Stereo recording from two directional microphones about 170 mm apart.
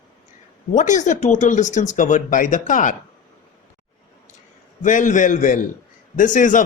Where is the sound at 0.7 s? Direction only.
45° left (ahead or behind).